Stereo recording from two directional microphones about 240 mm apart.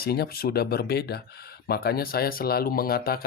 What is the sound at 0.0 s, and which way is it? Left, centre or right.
Speech, left.